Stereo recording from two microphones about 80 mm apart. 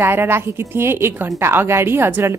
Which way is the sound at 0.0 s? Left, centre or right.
Right.